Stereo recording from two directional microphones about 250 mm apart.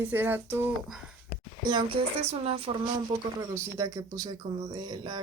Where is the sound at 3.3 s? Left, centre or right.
Centre.